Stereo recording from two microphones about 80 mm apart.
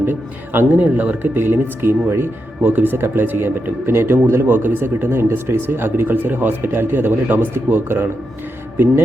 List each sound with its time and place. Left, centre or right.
0.0 s speech: right